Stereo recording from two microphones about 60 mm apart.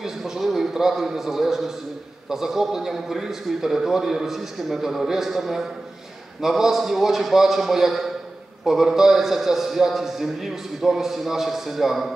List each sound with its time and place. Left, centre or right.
0.0 s a man's voice: centre